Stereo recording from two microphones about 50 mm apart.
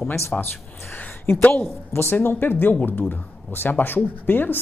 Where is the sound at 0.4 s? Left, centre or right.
Left.